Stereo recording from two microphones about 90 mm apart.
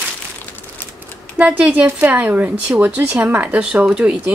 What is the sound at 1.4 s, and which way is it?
Speech, 15° right (ahead or behind).